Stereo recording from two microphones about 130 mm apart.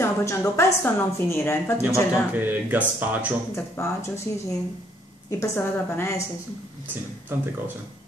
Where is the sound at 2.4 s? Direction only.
15° right (ahead or behind).